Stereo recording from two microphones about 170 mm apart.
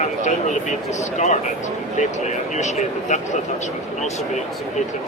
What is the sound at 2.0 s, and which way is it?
Speech, 45° left (ahead or behind).